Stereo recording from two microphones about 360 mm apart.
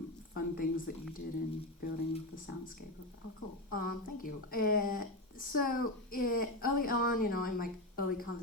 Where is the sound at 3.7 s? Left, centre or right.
Left.